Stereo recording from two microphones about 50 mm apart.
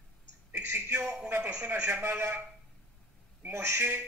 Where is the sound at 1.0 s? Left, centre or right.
Centre.